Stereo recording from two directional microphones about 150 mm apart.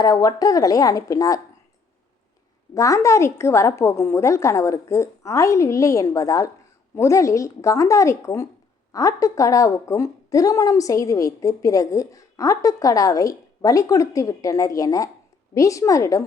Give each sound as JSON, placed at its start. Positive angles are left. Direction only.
{"t": 0.0, "sound": "a woman's voice", "side_deg": 25}
{"t": 2.7, "sound": "a woman's voice", "side_deg": 20}